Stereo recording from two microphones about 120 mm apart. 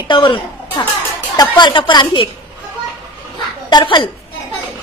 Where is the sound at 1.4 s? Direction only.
35° left (ahead or behind).